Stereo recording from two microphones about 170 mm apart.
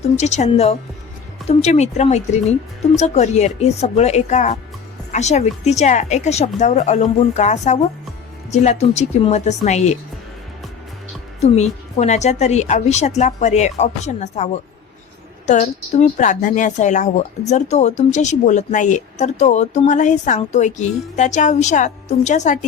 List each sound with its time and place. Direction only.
0.2 s a woman's voice: 40° left (ahead or behind)
11.3 s a woman's voice: 40° left (ahead or behind)